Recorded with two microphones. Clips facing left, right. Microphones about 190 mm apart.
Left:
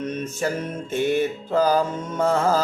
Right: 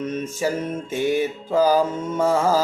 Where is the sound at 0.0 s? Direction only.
10° right (ahead or behind).